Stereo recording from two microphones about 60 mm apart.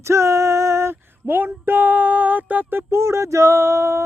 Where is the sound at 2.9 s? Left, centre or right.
Right.